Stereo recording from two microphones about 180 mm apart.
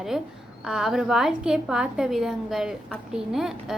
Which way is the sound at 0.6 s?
5° right (ahead or behind).